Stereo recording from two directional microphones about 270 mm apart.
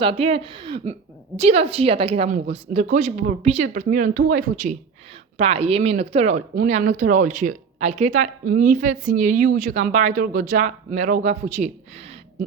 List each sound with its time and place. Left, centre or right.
0.0 s speech: right